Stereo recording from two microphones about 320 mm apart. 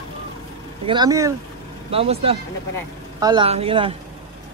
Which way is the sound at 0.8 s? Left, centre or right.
Centre.